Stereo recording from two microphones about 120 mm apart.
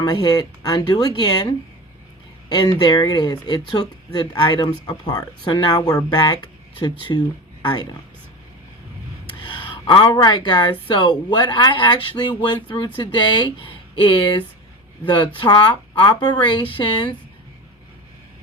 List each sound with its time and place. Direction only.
0.0 s speech: 35° left (ahead or behind)
9.2 s speech: 40° left (ahead or behind)